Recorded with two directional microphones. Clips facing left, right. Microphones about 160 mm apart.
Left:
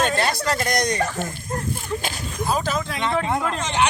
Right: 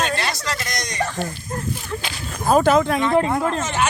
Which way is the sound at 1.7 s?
45° left (ahead or behind).